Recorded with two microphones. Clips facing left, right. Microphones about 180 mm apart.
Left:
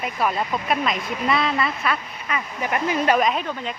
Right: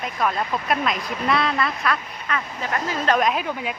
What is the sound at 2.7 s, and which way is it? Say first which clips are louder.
Speech: left 2 dB; 15° left (ahead or behind).